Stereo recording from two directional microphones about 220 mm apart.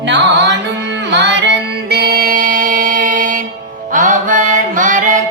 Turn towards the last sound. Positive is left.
turn(degrees=-35)  # may be behind; listen again after turning